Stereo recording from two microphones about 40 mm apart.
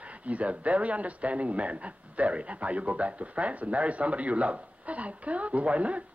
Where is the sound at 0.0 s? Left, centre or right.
Right.